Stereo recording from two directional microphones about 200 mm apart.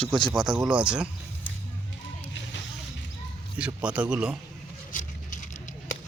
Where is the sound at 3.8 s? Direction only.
5° right (ahead or behind).